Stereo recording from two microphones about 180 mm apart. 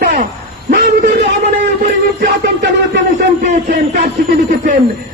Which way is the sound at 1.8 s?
50° right (ahead or behind).